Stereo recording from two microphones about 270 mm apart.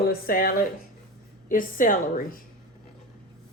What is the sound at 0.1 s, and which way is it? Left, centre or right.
Speech, left.